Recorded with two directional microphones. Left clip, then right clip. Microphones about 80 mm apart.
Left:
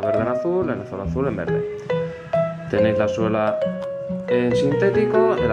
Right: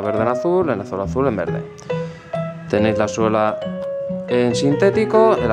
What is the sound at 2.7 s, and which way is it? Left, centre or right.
Speech, right.